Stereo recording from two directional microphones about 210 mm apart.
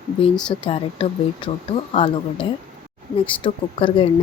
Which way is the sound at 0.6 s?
25° left (ahead or behind).